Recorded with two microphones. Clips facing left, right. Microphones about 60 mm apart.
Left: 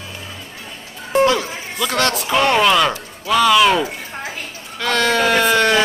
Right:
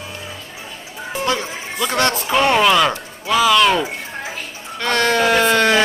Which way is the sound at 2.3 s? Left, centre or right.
Centre.